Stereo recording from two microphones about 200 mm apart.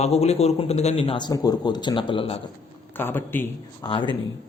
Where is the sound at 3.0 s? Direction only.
10° left (ahead or behind).